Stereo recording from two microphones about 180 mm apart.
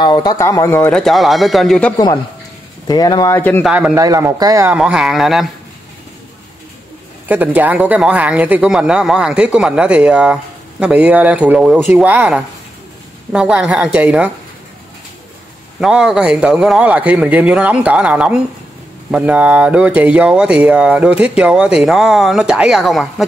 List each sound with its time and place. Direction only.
0.0 s speech: 25° left (ahead or behind); by 2.0 s 5° left (ahead or behind)
2.9 s speech: 20° left (ahead or behind)
3.6 s speech: 5° right (ahead or behind)
3.9 s speech: 15° right (ahead or behind)
4.7 s speech: 5° right (ahead or behind)
7.2 s speech: 10° right (ahead or behind)
15.8 s speech: 5° right (ahead or behind)